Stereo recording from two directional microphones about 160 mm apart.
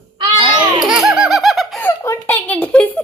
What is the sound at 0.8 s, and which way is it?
Laughter, 5° right (ahead or behind).